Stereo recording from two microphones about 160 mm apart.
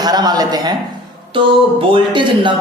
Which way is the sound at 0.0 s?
25° right (ahead or behind).